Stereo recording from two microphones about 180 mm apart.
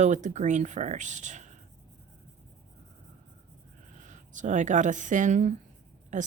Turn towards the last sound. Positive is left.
turn(degrees=-45)  # may be behind; listen again after turning